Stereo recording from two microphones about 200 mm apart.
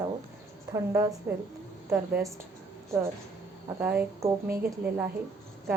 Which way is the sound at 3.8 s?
10° right (ahead or behind).